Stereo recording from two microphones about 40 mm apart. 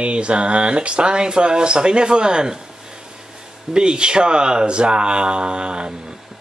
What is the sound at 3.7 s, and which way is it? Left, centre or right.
Speech, right.